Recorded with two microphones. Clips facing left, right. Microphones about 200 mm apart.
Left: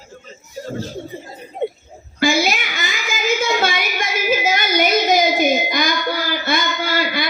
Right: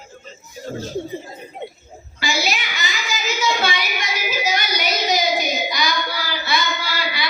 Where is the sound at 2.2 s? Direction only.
50° left (ahead or behind).